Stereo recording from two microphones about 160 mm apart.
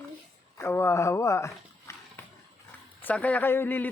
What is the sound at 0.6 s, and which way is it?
Speech, 15° left (ahead or behind).